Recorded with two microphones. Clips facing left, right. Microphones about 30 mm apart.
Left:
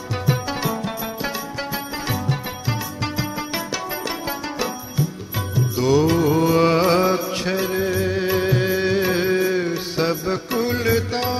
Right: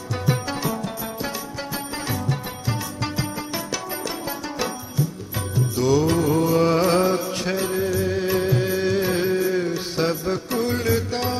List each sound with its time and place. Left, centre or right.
0.6 s music: left
5.5 s music: left
6.4 s mantra: left
7.7 s music: left
8.1 s music: left
9.6 s music: left